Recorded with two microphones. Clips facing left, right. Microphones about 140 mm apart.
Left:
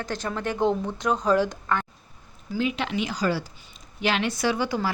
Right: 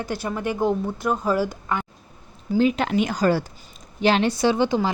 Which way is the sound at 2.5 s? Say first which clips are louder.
Right 7 dB; 40° right (ahead or behind).